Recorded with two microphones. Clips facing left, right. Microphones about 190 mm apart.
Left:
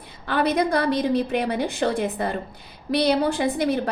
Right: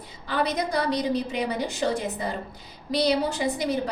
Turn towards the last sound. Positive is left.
turn(degrees=60)  # may be behind; listen again after turning